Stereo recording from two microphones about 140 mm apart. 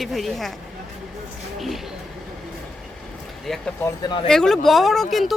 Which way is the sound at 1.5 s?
Centre (ahead or behind).